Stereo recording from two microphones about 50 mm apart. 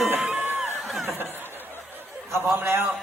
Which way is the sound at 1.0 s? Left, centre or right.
Right.